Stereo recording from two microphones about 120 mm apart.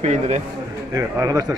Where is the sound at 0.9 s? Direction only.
30° right (ahead or behind).